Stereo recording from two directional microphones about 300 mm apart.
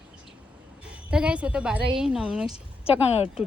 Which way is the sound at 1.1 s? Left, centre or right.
Centre.